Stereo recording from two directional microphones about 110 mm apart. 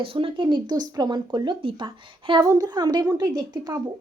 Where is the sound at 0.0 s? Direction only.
55° right (ahead or behind).